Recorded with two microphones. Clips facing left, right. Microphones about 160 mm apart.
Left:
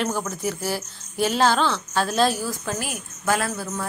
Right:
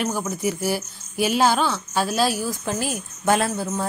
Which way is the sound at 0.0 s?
10° right (ahead or behind).